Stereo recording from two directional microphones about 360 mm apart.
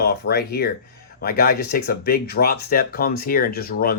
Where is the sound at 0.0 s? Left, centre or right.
Left.